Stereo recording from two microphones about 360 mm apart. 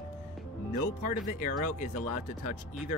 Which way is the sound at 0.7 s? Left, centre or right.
Left.